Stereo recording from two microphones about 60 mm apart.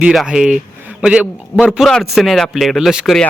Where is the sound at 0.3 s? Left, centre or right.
Centre.